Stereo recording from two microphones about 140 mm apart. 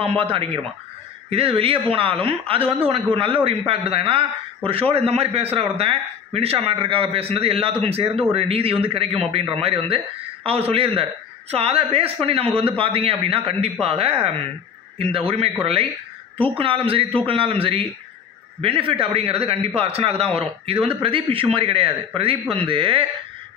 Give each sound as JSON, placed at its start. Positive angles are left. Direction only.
{"t": 0.0, "sound": "a man's voice", "side_deg": -40}